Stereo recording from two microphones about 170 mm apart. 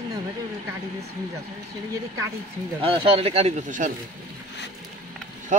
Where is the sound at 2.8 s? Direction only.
35° right (ahead or behind).